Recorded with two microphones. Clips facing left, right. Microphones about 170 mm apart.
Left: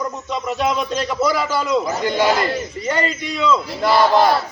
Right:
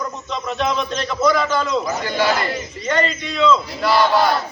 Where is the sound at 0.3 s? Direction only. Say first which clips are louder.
Left 1 dB; 10° left (ahead or behind).